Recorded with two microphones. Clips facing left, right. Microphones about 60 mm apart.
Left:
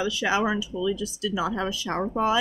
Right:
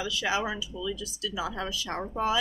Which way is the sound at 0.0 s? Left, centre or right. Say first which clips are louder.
Left 5 dB; left.